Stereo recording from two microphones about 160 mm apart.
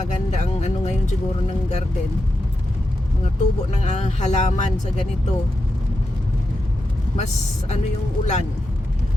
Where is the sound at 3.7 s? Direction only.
45° left (ahead or behind).